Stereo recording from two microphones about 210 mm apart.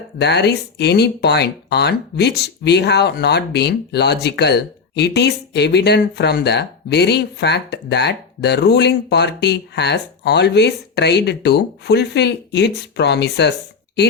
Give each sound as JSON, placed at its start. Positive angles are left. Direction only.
{"t": 0.2, "sound": "speech", "side_deg": 55}